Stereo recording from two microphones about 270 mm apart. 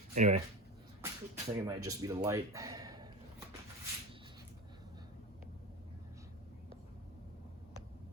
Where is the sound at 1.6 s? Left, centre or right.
Centre.